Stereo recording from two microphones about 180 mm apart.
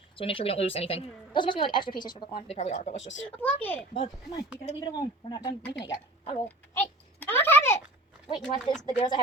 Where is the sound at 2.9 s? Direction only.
90° left.